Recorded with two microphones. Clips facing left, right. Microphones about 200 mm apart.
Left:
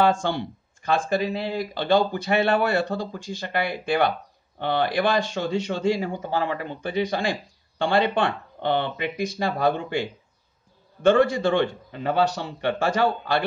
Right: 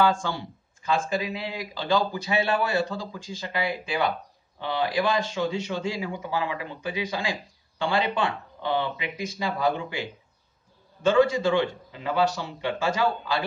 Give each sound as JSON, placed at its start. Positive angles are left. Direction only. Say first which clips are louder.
{"t": 0.0, "sound": "speech", "louder": "left 2 dB", "side_deg": 65}